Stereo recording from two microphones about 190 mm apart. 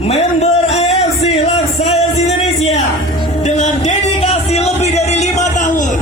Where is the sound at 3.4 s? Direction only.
40° left (ahead or behind).